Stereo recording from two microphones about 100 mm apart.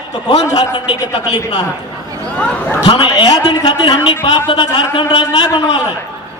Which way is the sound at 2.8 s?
50° left (ahead or behind).